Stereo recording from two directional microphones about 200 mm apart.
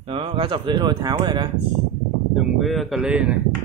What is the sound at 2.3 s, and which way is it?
Speech, centre (ahead or behind).